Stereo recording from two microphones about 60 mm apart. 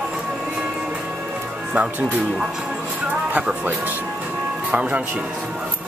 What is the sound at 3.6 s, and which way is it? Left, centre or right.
Speech, right.